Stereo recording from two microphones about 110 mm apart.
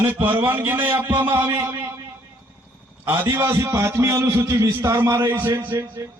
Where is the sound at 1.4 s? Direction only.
35° right (ahead or behind).